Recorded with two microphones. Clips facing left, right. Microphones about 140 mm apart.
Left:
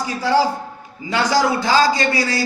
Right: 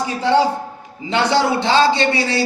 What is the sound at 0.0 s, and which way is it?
A man's voice, 25° right (ahead or behind).